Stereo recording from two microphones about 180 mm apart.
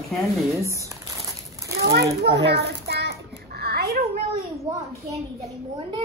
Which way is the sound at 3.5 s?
60° right (ahead or behind).